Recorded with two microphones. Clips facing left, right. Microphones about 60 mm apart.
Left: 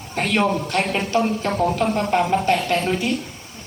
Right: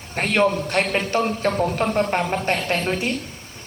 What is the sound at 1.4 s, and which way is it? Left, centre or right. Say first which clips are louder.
A woman's voice: left 1 dB; right.